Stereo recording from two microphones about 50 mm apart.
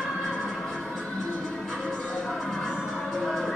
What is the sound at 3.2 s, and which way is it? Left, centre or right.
Music, centre.